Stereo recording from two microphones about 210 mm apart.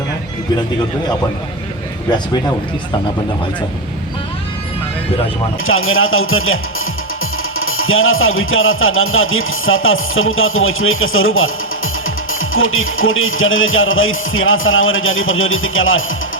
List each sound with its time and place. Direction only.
2.0 s a man's voice: 20° left (ahead or behind)
5.6 s music: 75° left (ahead or behind)